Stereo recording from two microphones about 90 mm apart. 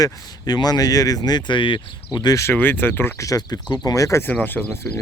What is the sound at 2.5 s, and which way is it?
Speech, 20° left (ahead or behind).